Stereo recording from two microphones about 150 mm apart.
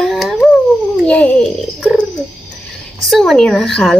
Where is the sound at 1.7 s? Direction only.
5° right (ahead or behind).